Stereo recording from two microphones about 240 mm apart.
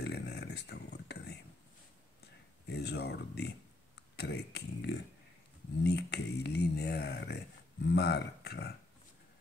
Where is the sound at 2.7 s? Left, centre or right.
Left.